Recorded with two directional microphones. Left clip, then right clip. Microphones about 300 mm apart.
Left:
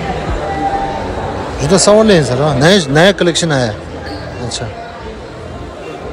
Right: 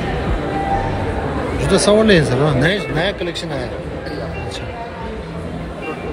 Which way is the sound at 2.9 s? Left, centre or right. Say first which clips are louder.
Left 10 dB; left.